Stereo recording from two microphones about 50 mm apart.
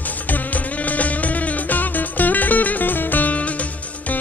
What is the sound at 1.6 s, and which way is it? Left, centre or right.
Music, left.